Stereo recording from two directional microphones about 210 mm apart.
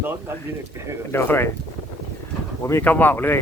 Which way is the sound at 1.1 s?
10° left (ahead or behind).